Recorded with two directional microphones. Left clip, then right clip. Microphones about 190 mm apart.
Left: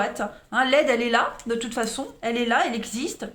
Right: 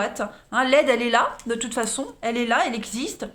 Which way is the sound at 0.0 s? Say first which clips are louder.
Even; 25° right (ahead or behind).